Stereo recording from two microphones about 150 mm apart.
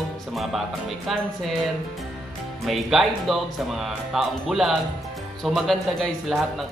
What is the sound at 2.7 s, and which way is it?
Speech, centre (ahead or behind).